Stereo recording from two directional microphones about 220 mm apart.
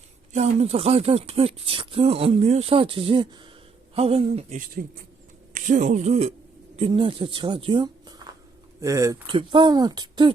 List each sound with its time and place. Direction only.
0.3 s speech: 30° right (ahead or behind)